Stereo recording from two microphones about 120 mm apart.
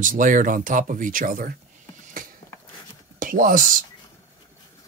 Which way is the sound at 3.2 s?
90° right.